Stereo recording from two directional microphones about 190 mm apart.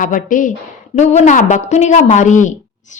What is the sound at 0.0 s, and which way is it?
A woman's voice, 45° left (ahead or behind).